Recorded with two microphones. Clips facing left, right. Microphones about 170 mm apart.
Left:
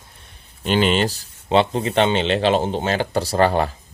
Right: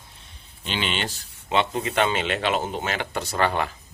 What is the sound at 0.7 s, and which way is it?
Speech, 45° left (ahead or behind).